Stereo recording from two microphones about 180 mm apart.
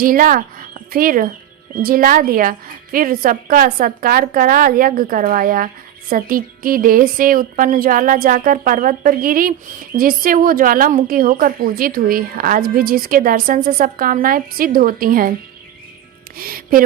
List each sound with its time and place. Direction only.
0.0 s a woman's voice: 50° right (ahead or behind)
16.4 s a woman's voice: 55° right (ahead or behind)